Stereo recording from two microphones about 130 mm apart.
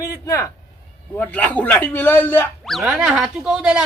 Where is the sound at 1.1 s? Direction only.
10° left (ahead or behind).